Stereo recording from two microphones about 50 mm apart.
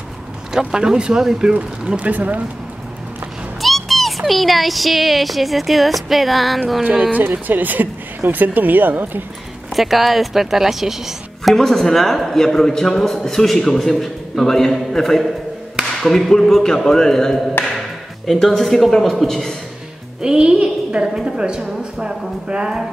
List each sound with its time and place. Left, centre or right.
0.5 s speech: centre; by 2.4 s right
3.6 s music: centre
4.2 s speech: centre
7.2 s speech: right
9.8 s speech: centre
11.5 s a man's voice: centre
20.2 s a woman's voice: centre